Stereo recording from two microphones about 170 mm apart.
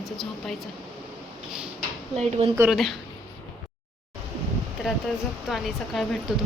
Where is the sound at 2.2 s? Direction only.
35° right (ahead or behind).